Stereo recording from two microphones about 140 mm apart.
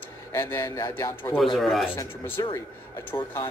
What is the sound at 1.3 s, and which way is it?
Speech, centre (ahead or behind).